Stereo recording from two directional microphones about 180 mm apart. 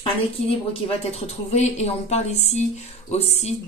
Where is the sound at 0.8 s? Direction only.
35° left (ahead or behind).